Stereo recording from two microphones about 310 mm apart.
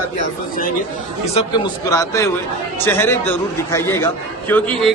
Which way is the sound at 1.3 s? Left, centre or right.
Centre.